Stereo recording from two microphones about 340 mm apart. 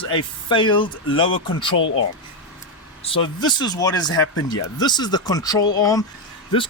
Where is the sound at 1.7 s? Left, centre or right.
Left.